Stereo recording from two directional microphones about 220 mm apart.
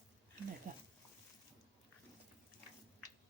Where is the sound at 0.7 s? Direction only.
35° right (ahead or behind).